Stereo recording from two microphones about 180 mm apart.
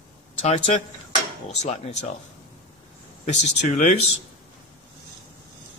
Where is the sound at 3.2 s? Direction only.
40° left (ahead or behind).